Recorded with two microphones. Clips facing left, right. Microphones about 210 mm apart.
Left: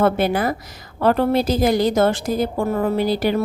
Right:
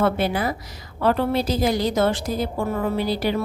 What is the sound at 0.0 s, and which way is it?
A woman's voice, 50° left (ahead or behind).